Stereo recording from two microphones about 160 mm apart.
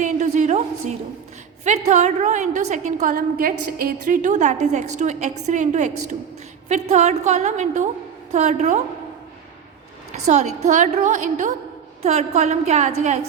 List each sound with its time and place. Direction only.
0.0 s a sound: 50° right (ahead or behind)
1.6 s a woman's voice: 45° right (ahead or behind)
10.2 s a woman's voice: 45° right (ahead or behind)